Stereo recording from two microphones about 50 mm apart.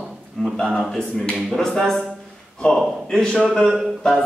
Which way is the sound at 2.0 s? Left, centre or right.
Centre.